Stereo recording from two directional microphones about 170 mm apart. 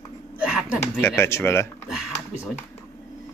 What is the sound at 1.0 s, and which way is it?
Speech, 15° left (ahead or behind).